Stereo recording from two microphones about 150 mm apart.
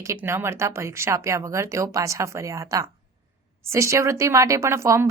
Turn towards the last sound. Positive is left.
turn(degrees=-20)  # may be behind; listen again after turning